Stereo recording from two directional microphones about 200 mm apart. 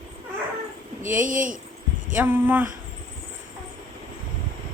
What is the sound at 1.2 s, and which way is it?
Speech, 40° right (ahead or behind).